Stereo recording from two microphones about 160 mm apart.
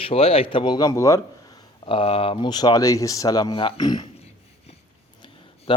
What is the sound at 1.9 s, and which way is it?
Speech, 35° left (ahead or behind).